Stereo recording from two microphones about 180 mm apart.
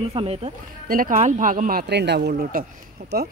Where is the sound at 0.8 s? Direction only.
50° right (ahead or behind).